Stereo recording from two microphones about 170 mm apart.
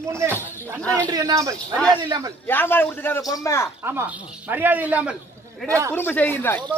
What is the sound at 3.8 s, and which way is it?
Speech, 10° right (ahead or behind).